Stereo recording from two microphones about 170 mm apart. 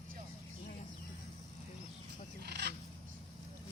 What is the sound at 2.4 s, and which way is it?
Fowl, 80° right.